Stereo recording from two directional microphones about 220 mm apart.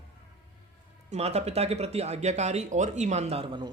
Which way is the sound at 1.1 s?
30° right (ahead or behind).